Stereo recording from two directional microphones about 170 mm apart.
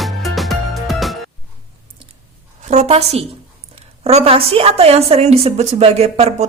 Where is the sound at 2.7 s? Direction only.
40° right (ahead or behind).